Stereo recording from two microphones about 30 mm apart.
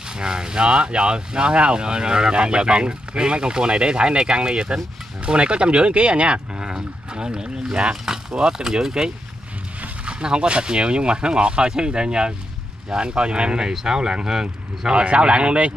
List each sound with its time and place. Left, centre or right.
0.1 s speech: right
8.0 s speech: centre
10.0 s speech: right
14.9 s speech: right